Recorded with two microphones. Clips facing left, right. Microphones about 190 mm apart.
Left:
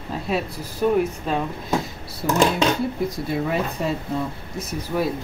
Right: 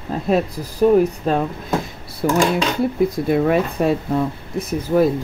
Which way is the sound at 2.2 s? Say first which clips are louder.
Right 2 dB; 65° right (ahead or behind).